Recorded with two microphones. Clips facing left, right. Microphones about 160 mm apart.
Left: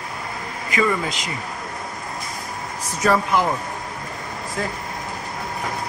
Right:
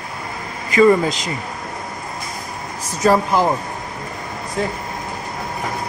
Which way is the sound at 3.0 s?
35° right (ahead or behind).